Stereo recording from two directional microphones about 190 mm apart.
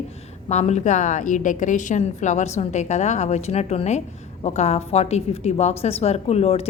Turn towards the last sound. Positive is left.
turn(degrees=30)  # may be behind; listen again after turning